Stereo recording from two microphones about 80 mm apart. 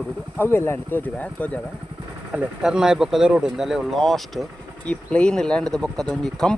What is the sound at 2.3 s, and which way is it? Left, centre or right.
Speech, centre.